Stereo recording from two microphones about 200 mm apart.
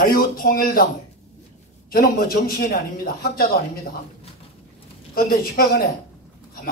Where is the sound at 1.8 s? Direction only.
50° left (ahead or behind).